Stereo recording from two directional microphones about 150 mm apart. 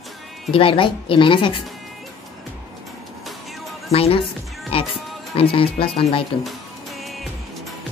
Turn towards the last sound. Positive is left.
turn(degrees=0)  # may be behind; listen again after turning